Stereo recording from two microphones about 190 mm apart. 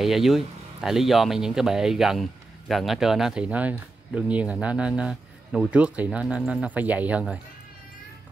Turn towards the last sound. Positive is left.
turn(degrees=-5)  # may be behind; listen again after turning